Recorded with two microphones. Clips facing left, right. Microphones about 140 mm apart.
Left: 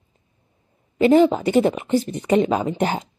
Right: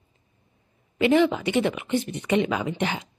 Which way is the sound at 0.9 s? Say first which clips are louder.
Left 5 dB; 35° left (ahead or behind).